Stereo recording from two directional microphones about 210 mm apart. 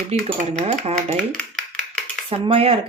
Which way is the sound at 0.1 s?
30° right (ahead or behind).